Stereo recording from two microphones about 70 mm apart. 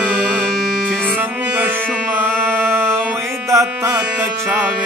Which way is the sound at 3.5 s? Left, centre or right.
Right.